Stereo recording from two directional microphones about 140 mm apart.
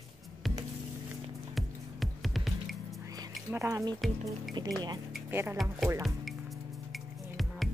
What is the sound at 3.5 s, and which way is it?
Speech, 20° right (ahead or behind).